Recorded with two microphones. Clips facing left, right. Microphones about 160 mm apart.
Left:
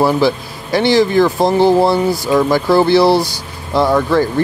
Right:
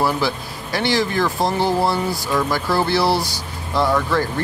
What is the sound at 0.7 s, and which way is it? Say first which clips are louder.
Speech: left 8 dB; 20° left (ahead or behind).